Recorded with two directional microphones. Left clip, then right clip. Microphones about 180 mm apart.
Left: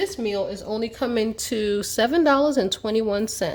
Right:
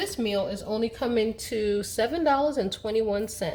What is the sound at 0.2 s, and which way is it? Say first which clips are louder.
Speech: left 2 dB; 30° left (ahead or behind).